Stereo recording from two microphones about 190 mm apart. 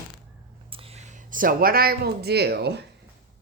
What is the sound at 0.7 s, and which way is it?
Speech, 30° right (ahead or behind).